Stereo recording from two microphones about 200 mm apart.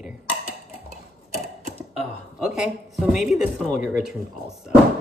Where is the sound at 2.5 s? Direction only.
Centre (ahead or behind).